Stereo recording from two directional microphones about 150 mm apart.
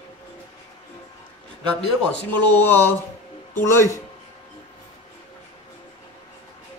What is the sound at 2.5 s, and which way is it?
Speech, 15° left (ahead or behind).